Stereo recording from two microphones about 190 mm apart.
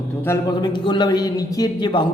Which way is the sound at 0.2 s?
15° left (ahead or behind).